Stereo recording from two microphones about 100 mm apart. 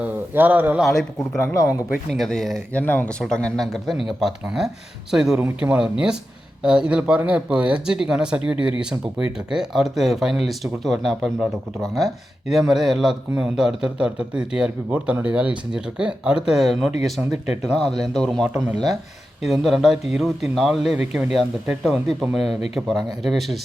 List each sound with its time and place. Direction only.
0.0 s speech: 15° right (ahead or behind)
0.8 s speech: 5° left (ahead or behind)
2.7 s speech: 15° left (ahead or behind); by 17.7 s 5° right (ahead or behind)
17.7 s speech: 5° left (ahead or behind)